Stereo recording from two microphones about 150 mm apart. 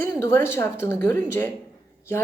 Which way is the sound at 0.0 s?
15° left (ahead or behind).